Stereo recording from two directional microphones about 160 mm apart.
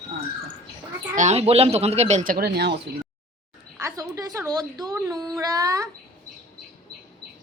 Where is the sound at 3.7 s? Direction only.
20° right (ahead or behind).